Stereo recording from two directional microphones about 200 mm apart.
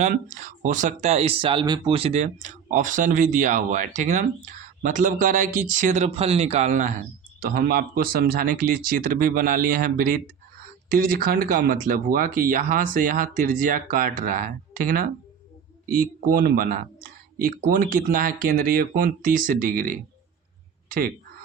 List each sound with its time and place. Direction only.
0.0 s speech: 40° right (ahead or behind)